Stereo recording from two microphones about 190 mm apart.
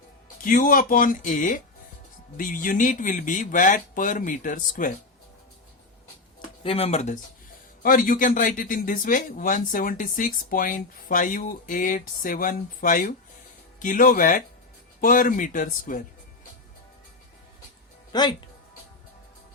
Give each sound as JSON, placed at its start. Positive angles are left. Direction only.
{"t": 0.4, "sound": "speech", "side_deg": 45}
{"t": 6.6, "sound": "speech", "side_deg": 30}
{"t": 7.8, "sound": "speech", "side_deg": 45}
{"t": 18.1, "sound": "speech", "side_deg": 20}